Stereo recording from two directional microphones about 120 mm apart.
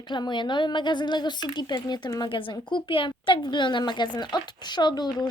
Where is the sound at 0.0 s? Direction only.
40° left (ahead or behind).